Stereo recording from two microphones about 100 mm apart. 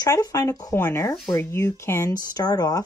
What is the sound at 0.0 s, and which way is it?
Speech, 40° left (ahead or behind).